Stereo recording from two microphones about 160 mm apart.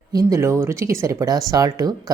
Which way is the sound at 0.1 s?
20° right (ahead or behind).